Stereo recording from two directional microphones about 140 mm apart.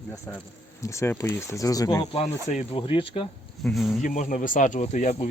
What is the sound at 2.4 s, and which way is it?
Speech, 50° left (ahead or behind).